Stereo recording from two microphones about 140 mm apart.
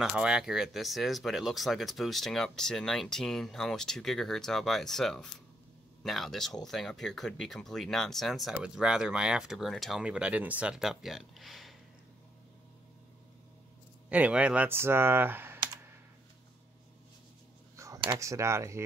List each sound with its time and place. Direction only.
0.0 s speech: 5° right (ahead or behind)
14.0 s speech: 10° right (ahead or behind)
17.7 s a sound: 25° right (ahead or behind)
18.2 s speech: 20° right (ahead or behind)